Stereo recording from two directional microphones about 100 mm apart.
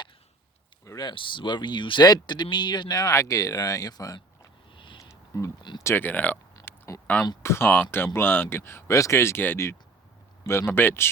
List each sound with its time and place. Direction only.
0.9 s speech: 40° left (ahead or behind)
1.1 s speech: 55° left (ahead or behind); by 4.2 s 40° left (ahead or behind)
4.7 s a sound: 55° left (ahead or behind)
5.8 s speech: 20° left (ahead or behind)
6.7 s a sound: 30° left (ahead or behind)
7.4 s speech: 25° left (ahead or behind)